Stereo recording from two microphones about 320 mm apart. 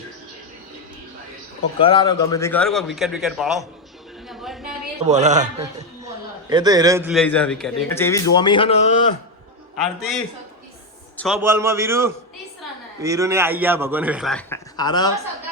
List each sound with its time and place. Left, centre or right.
1.8 s a man's voice: centre
4.3 s a sound: centre
4.6 s a man's voice: right; by 9.0 s centre
9.8 s a man's voice: centre
11.2 s a man's voice: centre